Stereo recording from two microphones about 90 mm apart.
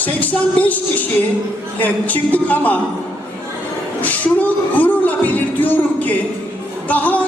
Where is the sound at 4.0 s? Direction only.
15° left (ahead or behind).